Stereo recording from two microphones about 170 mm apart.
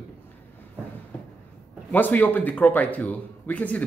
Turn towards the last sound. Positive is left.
turn(degrees=10)  # may be behind; listen again after turning